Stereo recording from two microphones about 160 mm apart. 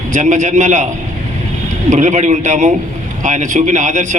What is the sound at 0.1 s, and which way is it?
Speech, 50° right (ahead or behind).